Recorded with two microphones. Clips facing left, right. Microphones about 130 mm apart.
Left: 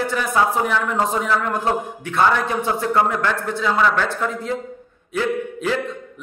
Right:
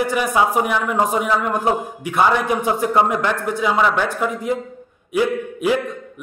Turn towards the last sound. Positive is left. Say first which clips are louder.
# right 3 dB
turn(degrees=-15)  # may be behind; listen again after turning